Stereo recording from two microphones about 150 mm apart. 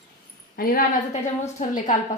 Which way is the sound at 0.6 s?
80° left.